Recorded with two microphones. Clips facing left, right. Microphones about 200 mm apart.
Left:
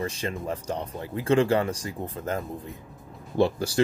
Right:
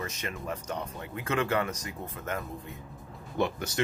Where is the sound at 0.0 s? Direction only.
30° left (ahead or behind).